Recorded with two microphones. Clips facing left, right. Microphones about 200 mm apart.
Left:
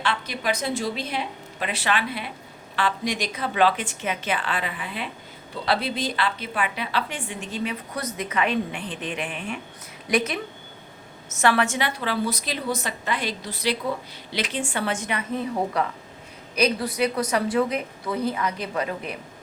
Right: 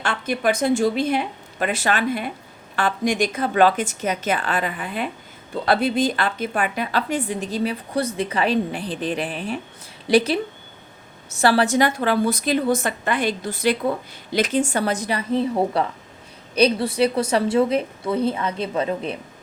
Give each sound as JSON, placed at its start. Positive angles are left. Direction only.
{"t": 0.0, "sound": "a woman's voice", "side_deg": -50}